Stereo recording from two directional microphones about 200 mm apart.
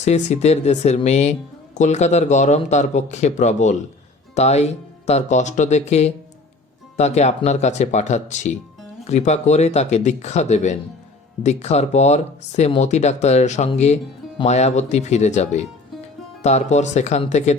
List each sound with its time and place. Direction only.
0.0 s speech: 35° left (ahead or behind)